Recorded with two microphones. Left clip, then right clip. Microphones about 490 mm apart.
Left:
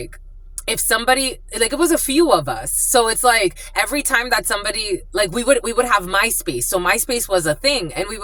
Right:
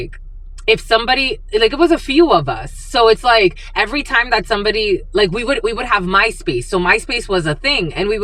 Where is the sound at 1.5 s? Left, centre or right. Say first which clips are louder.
Right 5 dB; left.